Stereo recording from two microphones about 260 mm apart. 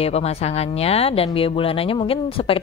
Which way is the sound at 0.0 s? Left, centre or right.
Left.